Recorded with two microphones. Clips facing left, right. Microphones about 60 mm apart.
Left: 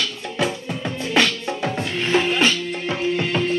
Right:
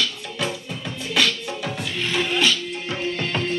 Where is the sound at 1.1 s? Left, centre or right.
Left.